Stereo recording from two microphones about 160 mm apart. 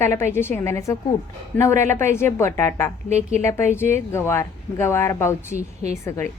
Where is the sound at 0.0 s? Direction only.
15° left (ahead or behind).